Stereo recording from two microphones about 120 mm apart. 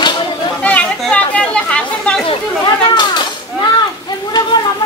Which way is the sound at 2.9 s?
40° left (ahead or behind).